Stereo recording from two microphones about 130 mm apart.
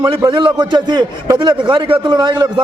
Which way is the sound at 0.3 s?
35° right (ahead or behind).